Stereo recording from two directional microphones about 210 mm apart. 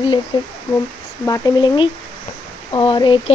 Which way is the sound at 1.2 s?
15° left (ahead or behind).